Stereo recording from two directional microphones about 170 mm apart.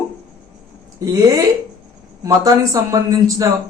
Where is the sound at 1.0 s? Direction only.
20° right (ahead or behind).